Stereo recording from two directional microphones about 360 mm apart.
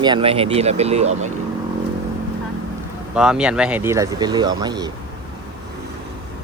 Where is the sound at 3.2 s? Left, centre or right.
Centre.